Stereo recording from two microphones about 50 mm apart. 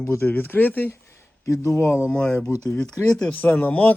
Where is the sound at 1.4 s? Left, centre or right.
Left.